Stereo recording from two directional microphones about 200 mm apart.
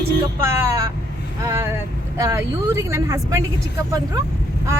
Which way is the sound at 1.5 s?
15° right (ahead or behind).